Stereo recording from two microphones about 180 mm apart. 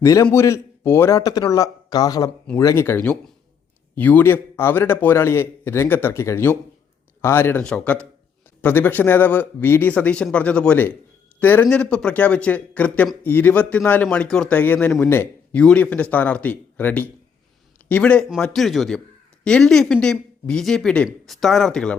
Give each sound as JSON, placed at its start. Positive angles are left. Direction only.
{"t": 0.0, "sound": "a man's voice", "side_deg": 20}